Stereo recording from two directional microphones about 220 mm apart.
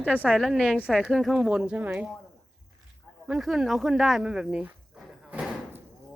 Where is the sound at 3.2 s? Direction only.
Centre (ahead or behind).